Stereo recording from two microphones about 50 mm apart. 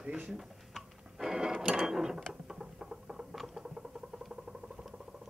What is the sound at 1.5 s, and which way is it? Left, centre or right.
Mechanisms, centre.